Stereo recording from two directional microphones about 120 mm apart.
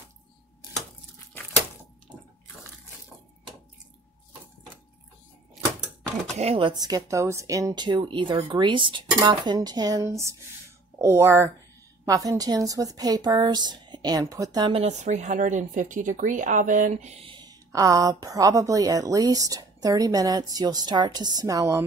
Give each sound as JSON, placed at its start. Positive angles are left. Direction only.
{"t": 6.3, "sound": "speech", "side_deg": -65}
{"t": 6.6, "sound": "a woman's voice", "side_deg": -35}
{"t": 14.7, "sound": "speech", "side_deg": -65}
{"t": 17.2, "sound": "a woman's voice", "side_deg": -40}